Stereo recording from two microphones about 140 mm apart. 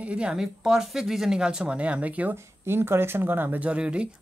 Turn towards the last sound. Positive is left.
turn(degrees=-10)  # may be behind; listen again after turning